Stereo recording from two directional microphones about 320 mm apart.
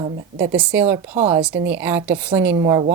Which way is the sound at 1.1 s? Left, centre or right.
Centre.